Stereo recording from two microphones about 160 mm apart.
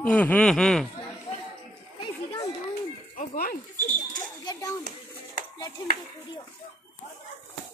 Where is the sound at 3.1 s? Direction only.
65° left (ahead or behind).